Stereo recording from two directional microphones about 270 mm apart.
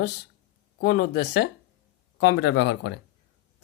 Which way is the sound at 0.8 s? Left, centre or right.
Left.